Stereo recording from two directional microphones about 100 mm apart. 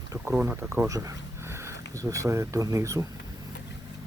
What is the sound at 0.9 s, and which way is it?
Speech, 35° right (ahead or behind).